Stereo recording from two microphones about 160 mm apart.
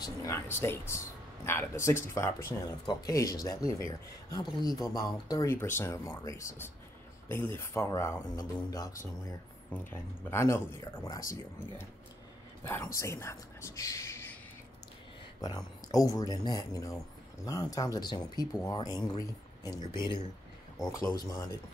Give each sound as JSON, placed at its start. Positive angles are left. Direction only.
{"t": 0.0, "sound": "speech", "side_deg": 15}
{"t": 12.6, "sound": "speech", "side_deg": 20}
{"t": 15.4, "sound": "speech", "side_deg": 25}